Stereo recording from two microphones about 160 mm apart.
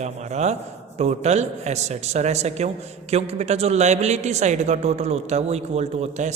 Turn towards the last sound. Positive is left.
turn(degrees=-45)  # may be behind; listen again after turning